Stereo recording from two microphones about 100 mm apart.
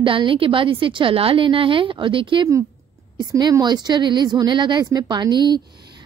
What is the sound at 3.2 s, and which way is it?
A woman's voice, 45° right (ahead or behind).